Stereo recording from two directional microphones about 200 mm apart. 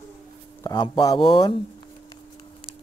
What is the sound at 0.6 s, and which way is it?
Speech, 20° left (ahead or behind).